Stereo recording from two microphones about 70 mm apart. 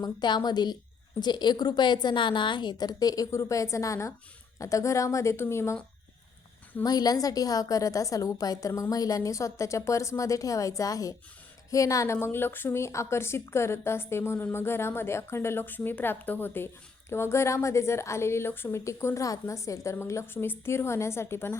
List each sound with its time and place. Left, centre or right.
0.0 s a woman's voice: left
3.3 s speech: left
6.8 s a woman's voice: left
12.0 s a woman's voice: left
17.1 s a woman's voice: left